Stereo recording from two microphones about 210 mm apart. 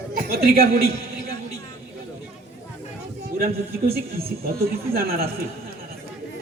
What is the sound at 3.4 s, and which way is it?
A man's voice, 45° right (ahead or behind).